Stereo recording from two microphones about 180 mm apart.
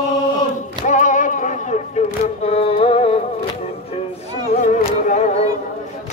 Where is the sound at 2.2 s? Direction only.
35° left (ahead or behind).